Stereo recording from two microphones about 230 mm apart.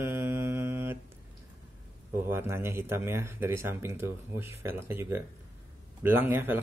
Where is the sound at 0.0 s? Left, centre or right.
Centre.